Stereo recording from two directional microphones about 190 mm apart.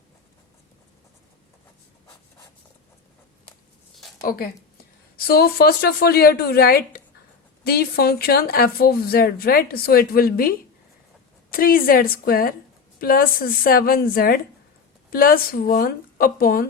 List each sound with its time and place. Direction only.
5.1 s a woman's voice: 55° left (ahead or behind)
11.5 s speech: 50° left (ahead or behind)